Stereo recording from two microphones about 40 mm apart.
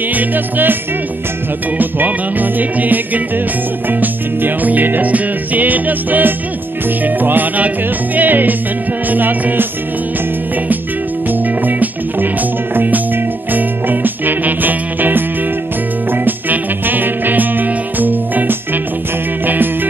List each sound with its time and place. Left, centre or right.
0.1 s music: right
1.8 s music: right
4.0 s music: right
11.6 s music: right